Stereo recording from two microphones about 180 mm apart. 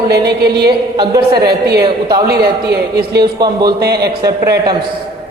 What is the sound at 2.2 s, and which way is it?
A man's voice, 60° right (ahead or behind).